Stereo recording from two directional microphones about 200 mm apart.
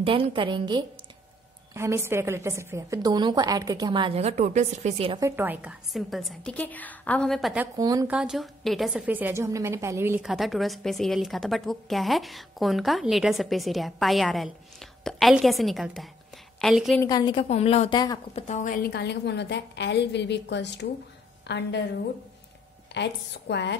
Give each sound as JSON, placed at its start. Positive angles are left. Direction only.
{"t": 0.0, "sound": "a woman's voice", "side_deg": -25}
{"t": 5.2, "sound": "a woman's voice", "side_deg": -10}
{"t": 7.6, "sound": "a woman's voice", "side_deg": -20}
{"t": 8.1, "sound": "a woman's voice", "side_deg": -5}
{"t": 10.2, "sound": "a woman's voice", "side_deg": 0}
{"t": 17.0, "sound": "a woman's voice", "side_deg": 20}
{"t": 18.5, "sound": "a woman's voice", "side_deg": 40}
{"t": 22.9, "sound": "a woman's voice", "side_deg": 60}